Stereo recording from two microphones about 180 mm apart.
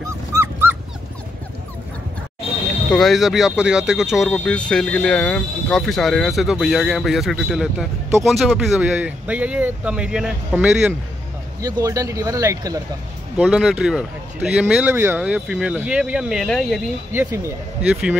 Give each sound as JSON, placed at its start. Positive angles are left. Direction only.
{"t": 0.3, "sound": "dog", "side_deg": -15}
{"t": 2.9, "sound": "speech", "side_deg": 0}
{"t": 11.6, "sound": "speech", "side_deg": -20}
{"t": 13.4, "sound": "speech", "side_deg": 0}
{"t": 17.1, "sound": "speech", "side_deg": -15}